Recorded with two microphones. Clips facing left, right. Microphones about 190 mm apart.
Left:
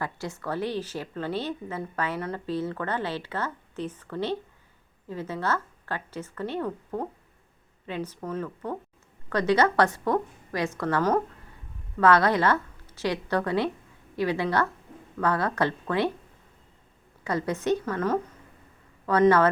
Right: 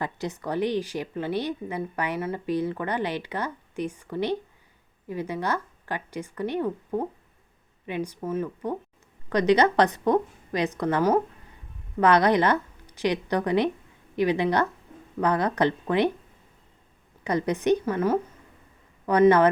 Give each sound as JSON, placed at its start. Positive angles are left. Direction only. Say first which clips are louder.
{"t": 0.0, "sound": "a woman's voice", "louder": "right 2 dB", "side_deg": -20}
{"t": 17.2, "sound": "a woman's voice", "louder": "right 3 dB", "side_deg": -20}